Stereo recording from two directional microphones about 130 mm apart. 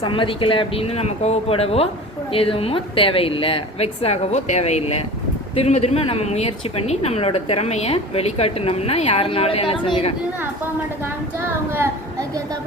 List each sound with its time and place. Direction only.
0.0 s a woman's voice: 40° left (ahead or behind)